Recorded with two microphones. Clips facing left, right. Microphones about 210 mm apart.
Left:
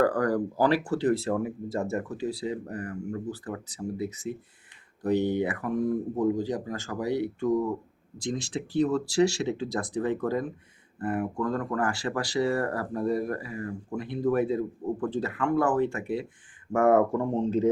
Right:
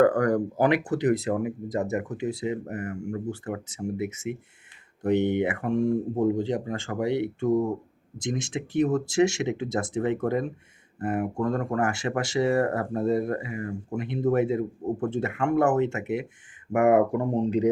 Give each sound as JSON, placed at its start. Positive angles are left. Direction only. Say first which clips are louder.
{"t": 0.0, "sound": "speech", "louder": "right 4 dB", "side_deg": -25}